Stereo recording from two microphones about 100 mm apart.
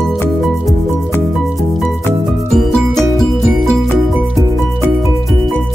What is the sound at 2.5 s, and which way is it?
Music, centre (ahead or behind).